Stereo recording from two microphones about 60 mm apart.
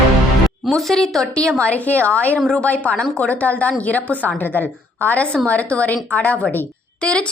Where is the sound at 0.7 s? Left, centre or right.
Centre.